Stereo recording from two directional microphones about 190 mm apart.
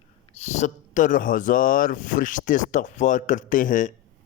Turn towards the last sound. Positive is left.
turn(degrees=45)  # may be behind; listen again after turning